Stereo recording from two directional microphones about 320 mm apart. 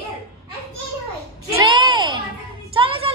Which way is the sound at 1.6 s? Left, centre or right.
Centre.